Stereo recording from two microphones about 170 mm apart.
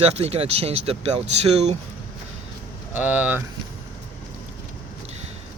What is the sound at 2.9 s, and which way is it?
Speech, 10° right (ahead or behind).